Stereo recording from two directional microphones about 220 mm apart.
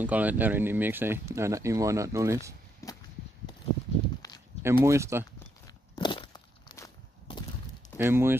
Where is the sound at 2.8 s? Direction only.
15° left (ahead or behind).